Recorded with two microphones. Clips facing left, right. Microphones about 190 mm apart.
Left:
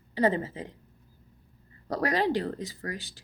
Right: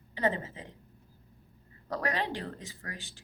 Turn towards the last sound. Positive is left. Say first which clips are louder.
# left 8 dB
turn(degrees=35)  # may be behind; listen again after turning